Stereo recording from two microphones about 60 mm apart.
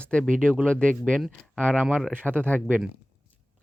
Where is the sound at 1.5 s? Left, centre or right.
Right.